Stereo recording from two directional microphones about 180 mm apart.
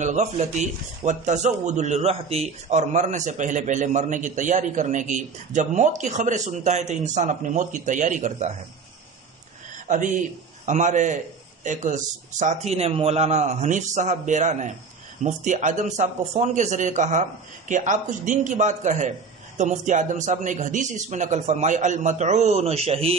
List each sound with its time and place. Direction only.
0.0 s speech: 40° right (ahead or behind)
9.8 s a man's voice: 45° right (ahead or behind)